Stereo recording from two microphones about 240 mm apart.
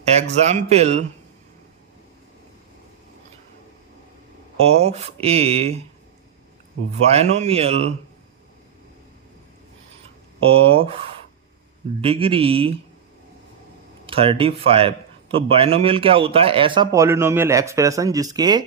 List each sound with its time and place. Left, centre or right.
0.3 s a man's voice: right
4.6 s a man's voice: right
7.0 s a man's voice: right
10.4 s a man's voice: right
12.0 s a man's voice: right
14.1 s a man's voice: right